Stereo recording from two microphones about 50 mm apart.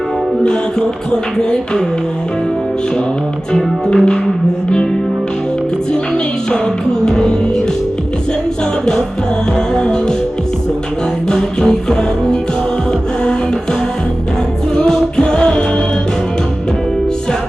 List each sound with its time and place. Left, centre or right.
0.4 s music: centre
3.5 s music: centre
7.0 s music: centre
9.7 s music: centre
11.3 s music: centre
14.8 s music: centre